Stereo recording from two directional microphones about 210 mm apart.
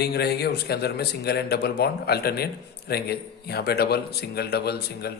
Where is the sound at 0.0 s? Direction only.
50° left (ahead or behind).